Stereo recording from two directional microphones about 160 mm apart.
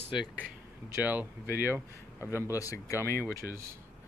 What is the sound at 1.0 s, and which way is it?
Speech, 10° right (ahead or behind).